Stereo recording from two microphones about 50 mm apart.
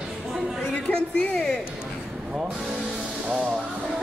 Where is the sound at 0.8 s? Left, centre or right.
Centre.